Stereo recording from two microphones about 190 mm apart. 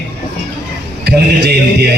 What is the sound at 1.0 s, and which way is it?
Speech, 60° right (ahead or behind).